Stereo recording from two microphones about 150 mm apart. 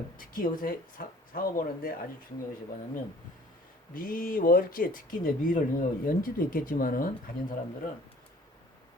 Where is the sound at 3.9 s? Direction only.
70° left (ahead or behind).